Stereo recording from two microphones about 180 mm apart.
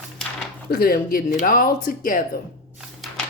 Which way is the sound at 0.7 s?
55° left (ahead or behind).